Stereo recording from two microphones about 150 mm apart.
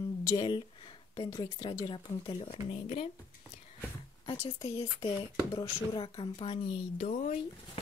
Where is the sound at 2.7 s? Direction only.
45° left (ahead or behind).